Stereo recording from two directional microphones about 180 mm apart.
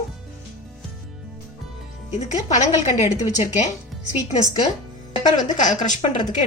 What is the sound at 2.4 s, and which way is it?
Speech, 40° left (ahead or behind).